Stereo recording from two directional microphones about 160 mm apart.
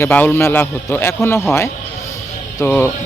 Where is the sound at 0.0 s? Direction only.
10° left (ahead or behind).